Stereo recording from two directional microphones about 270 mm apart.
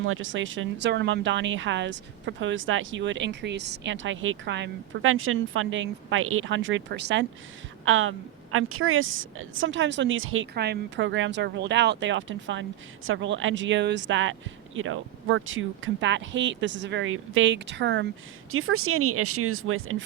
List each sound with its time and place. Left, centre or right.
0.0 s speech: right